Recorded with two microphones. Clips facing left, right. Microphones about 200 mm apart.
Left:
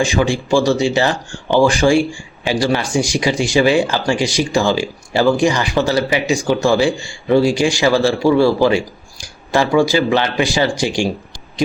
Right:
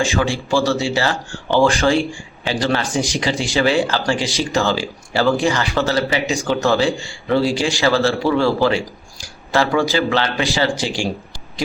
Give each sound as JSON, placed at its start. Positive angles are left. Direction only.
{"t": 0.0, "sound": "speech", "side_deg": 15}